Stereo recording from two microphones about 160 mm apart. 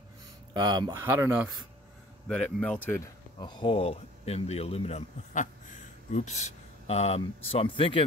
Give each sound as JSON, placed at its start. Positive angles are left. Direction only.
{"t": 0.6, "sound": "speech", "side_deg": -25}
{"t": 1.0, "sound": "speech", "side_deg": -15}
{"t": 2.2, "sound": "speech", "side_deg": 5}
{"t": 3.3, "sound": "speech", "side_deg": 25}